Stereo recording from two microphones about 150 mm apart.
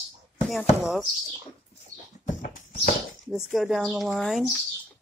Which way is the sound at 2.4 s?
65° left (ahead or behind).